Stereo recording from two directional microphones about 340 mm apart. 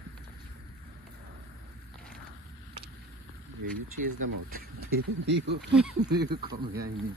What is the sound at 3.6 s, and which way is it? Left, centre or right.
Speech, right.